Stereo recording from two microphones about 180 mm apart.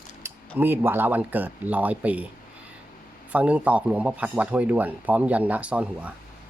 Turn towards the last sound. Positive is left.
turn(degrees=-5)  # may be behind; listen again after turning